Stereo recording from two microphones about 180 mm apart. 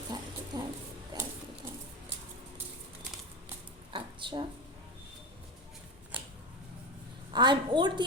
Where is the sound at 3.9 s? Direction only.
25° right (ahead or behind).